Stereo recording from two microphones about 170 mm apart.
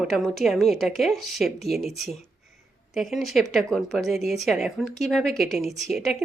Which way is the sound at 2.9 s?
Centre (ahead or behind).